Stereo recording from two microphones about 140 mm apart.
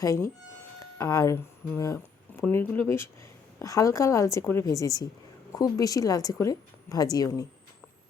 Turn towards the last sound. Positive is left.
turn(degrees=25)  # may be behind; listen again after turning